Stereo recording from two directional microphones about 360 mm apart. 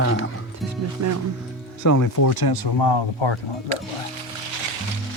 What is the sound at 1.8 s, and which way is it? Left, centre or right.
Speech, left.